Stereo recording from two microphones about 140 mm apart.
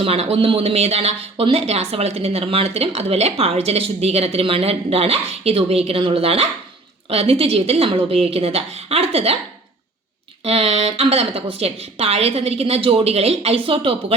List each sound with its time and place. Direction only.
0.0 s speech: 45° right (ahead or behind)
10.4 s speech: 45° right (ahead or behind)